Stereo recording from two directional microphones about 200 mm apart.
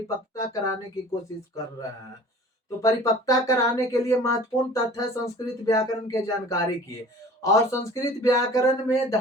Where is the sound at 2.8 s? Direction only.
15° left (ahead or behind).